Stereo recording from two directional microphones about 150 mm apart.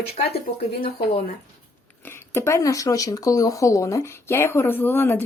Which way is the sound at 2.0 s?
15° left (ahead or behind).